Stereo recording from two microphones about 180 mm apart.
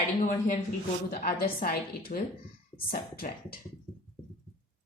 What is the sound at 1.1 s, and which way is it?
Speech, 55° left (ahead or behind).